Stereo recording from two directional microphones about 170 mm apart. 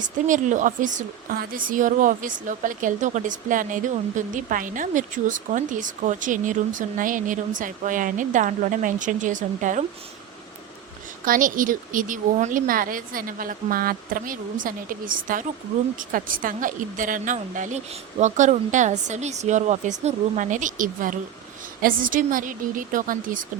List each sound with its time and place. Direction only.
0.0 s a woman's voice: 50° right (ahead or behind)
11.3 s a woman's voice: 55° right (ahead or behind)